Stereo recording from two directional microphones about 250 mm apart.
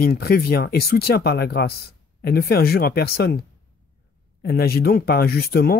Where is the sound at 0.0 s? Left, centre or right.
Left.